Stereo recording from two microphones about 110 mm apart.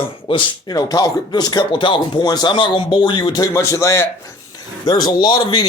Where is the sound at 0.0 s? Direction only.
50° left (ahead or behind).